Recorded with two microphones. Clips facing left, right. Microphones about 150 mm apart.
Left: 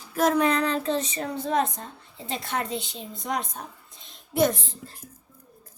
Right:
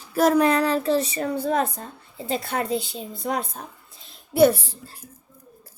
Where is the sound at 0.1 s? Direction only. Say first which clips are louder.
Right 4 dB; 10° right (ahead or behind).